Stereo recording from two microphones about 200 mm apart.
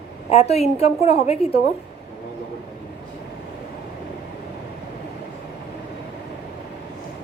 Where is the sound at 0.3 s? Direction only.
30° left (ahead or behind).